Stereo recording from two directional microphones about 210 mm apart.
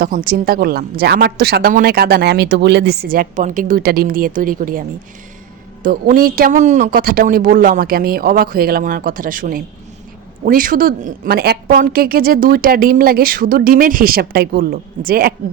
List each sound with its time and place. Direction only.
0.0 s a woman's voice: 40° right (ahead or behind)